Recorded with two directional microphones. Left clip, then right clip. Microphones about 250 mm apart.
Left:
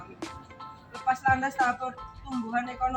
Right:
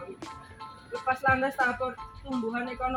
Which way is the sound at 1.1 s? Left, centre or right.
Centre.